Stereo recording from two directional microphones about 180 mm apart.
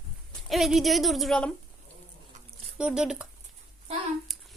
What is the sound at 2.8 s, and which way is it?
Speech, 5° right (ahead or behind).